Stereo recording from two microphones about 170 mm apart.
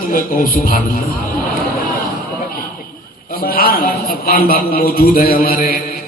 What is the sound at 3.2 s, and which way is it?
A man's voice, 60° left (ahead or behind).